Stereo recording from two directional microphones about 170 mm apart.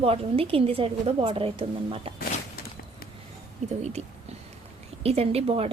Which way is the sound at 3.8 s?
40° right (ahead or behind).